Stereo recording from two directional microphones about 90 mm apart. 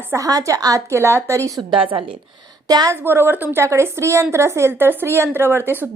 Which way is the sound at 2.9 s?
25° right (ahead or behind).